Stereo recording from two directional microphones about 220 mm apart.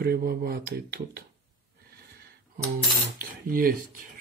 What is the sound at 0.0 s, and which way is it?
Speech, 45° right (ahead or behind).